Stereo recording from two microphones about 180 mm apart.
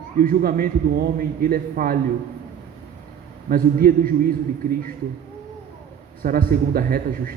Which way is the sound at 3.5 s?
55° right (ahead or behind).